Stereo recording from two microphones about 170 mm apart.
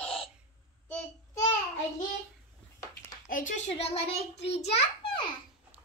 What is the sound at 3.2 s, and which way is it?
A child's voice, 50° left (ahead or behind).